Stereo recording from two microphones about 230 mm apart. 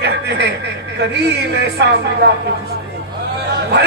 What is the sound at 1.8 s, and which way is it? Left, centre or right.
Speech, right.